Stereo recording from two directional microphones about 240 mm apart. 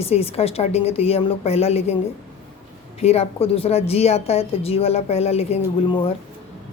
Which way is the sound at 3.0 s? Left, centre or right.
Left.